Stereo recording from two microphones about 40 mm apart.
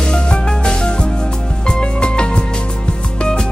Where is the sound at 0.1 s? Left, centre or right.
Centre.